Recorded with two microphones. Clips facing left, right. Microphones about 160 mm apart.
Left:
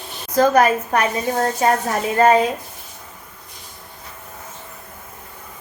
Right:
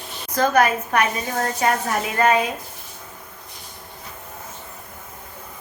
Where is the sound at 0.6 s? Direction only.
30° left (ahead or behind).